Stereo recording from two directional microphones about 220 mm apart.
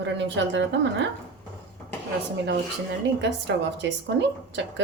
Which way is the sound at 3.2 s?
55° right (ahead or behind).